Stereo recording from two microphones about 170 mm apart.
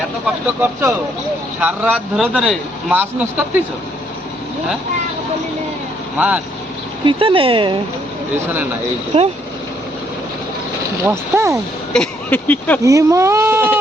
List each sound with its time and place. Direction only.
0.6 s a man's voice: 15° right (ahead or behind)
6.1 s a man's voice: 10° right (ahead or behind)
7.0 s speech: 30° right (ahead or behind)
9.1 s speech: 35° right (ahead or behind)
11.0 s a man's voice: 15° right (ahead or behind)
11.9 s speech: 10° left (ahead or behind)
12.8 s a man's voice: 20° right (ahead or behind)